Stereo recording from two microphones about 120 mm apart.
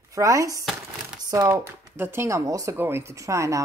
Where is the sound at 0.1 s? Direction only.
25° right (ahead or behind).